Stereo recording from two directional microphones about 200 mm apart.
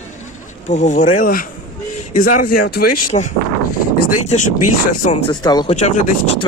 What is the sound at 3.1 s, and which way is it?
Speech, 35° left (ahead or behind).